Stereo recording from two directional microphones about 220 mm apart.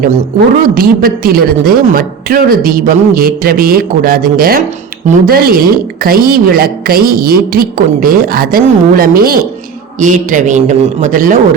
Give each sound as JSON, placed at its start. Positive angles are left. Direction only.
{"t": 0.6, "sound": "a woman's voice", "side_deg": -40}